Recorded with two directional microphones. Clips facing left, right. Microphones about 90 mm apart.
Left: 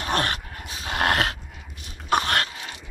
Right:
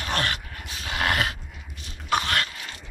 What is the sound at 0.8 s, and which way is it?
Dog, 45° left (ahead or behind).